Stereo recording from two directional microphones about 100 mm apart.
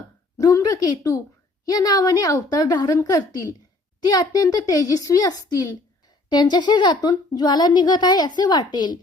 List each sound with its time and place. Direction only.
0.3 s a woman's voice: 35° left (ahead or behind)
6.3 s a woman's voice: 45° left (ahead or behind)